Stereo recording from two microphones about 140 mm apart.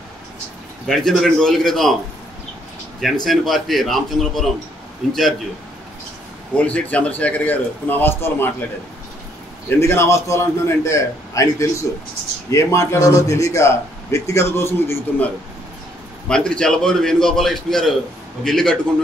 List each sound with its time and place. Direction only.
0.8 s a man's voice: 5° left (ahead or behind)
3.3 s a man's voice: centre (ahead or behind)
6.5 s a man's voice: 10° left (ahead or behind)
9.7 s a man's voice: 20° left (ahead or behind)